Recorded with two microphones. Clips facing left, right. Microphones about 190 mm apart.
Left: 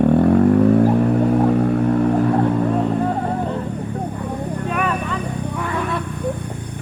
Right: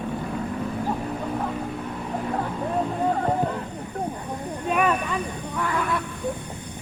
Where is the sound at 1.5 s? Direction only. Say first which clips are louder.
Left 13 dB; 60° left (ahead or behind).